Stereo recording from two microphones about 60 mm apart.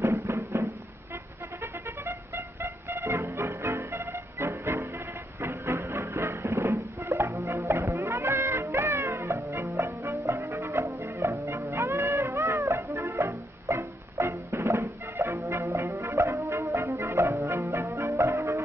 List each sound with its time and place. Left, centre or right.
0.0 s music: right
1.6 s music: right
15.3 s music: right